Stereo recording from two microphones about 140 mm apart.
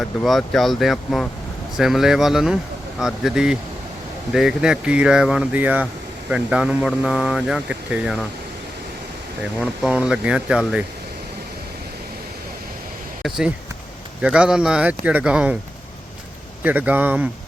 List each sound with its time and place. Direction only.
0.0 s speech: centre (ahead or behind)
9.6 s speech: 5° right (ahead or behind)
13.2 s speech: 5° right (ahead or behind)
16.6 s speech: 10° right (ahead or behind)